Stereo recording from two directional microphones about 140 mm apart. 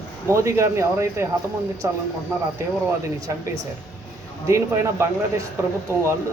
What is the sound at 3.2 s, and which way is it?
Speech, 25° right (ahead or behind).